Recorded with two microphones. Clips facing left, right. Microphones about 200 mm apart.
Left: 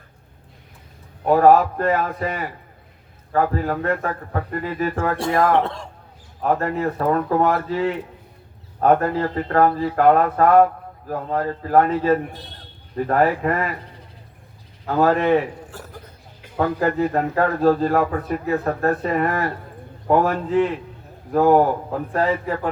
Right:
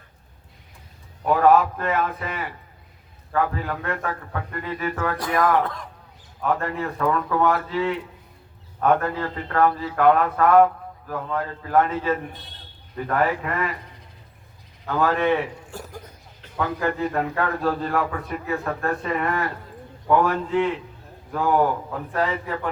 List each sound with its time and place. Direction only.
1.2 s a man's voice: 40° left (ahead or behind)
14.8 s a man's voice: 35° left (ahead or behind)
15.7 s speech: 15° right (ahead or behind)
16.6 s a man's voice: 35° left (ahead or behind)
21.3 s a man's voice: 40° left (ahead or behind)